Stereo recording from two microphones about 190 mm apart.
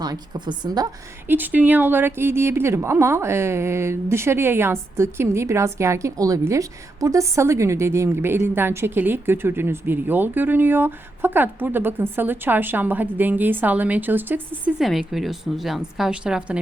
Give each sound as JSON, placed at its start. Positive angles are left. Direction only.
{"t": 0.0, "sound": "a woman's voice", "side_deg": -20}
{"t": 1.3, "sound": "a woman's voice", "side_deg": -10}